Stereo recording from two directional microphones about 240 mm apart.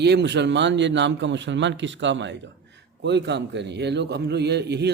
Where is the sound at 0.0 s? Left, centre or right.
Right.